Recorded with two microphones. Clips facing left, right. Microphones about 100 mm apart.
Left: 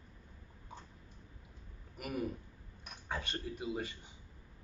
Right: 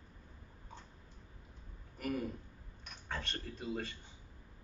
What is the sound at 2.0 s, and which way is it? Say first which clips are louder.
A man's voice: even; 15° left (ahead or behind).